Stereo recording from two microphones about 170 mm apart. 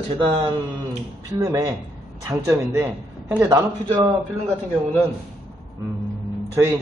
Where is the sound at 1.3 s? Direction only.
20° right (ahead or behind).